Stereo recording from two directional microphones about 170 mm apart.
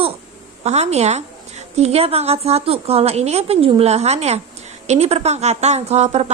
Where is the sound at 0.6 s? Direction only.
40° right (ahead or behind).